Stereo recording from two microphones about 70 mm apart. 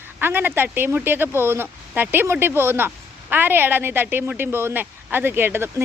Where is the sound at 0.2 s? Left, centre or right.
Right.